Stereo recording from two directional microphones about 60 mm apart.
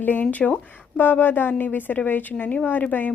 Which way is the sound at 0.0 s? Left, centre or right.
Left.